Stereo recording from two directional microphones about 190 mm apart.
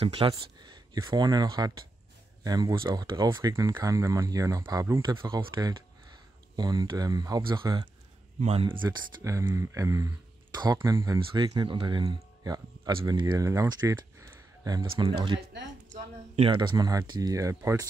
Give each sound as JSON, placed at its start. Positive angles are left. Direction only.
{"t": 0.0, "sound": "speech", "side_deg": -30}